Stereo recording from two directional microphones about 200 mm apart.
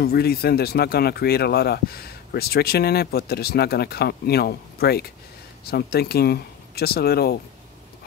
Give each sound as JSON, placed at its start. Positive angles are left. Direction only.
{"t": 0.0, "sound": "speech", "side_deg": 50}